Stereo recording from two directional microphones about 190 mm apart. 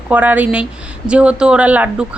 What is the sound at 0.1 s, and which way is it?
Speech, 10° right (ahead or behind).